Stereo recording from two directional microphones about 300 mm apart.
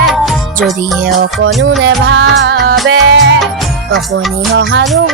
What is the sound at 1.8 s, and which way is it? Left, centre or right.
Music, right.